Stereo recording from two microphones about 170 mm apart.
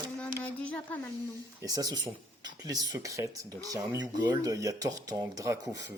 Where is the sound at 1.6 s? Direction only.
20° right (ahead or behind).